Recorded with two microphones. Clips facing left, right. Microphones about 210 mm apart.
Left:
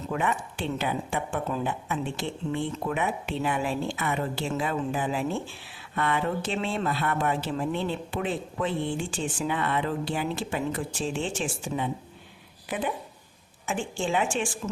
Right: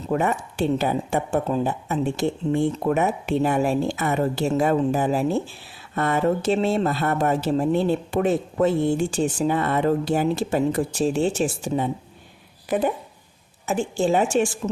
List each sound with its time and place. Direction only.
0.1 s a woman's voice: 40° right (ahead or behind)